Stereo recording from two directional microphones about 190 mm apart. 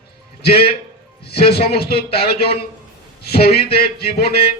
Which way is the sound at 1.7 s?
55° left (ahead or behind).